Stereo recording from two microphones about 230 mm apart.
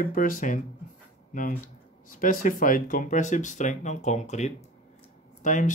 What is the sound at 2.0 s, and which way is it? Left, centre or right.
Speech, left.